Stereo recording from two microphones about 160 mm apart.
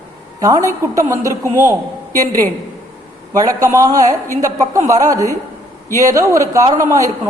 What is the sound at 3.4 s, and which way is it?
A man's voice, 20° right (ahead or behind).